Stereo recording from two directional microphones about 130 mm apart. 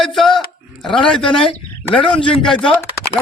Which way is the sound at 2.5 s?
5° left (ahead or behind).